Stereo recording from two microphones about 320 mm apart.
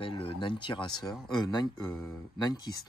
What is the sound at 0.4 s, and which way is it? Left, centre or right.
Speech, centre.